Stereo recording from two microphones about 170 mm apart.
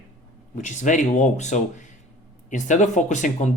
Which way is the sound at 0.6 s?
45° left (ahead or behind).